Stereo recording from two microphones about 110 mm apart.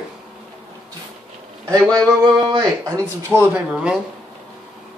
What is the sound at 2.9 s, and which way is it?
Speech, 20° right (ahead or behind).